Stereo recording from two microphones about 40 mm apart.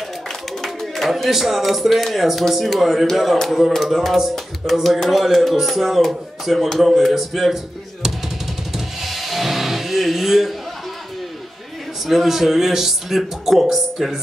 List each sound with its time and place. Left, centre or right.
0.6 s speech: centre
8.7 s music: centre
12.1 s speech: centre